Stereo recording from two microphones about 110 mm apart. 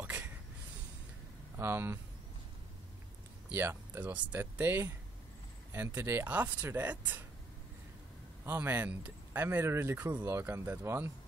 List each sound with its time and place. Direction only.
1.6 s speech: 20° right (ahead or behind)
3.4 s speech: 20° right (ahead or behind)
8.5 s speech: 20° right (ahead or behind)